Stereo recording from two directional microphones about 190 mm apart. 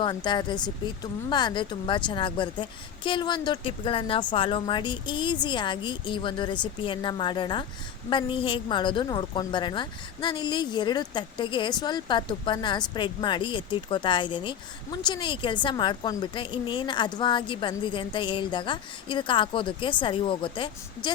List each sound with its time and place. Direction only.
0.0 s speech: 25° left (ahead or behind)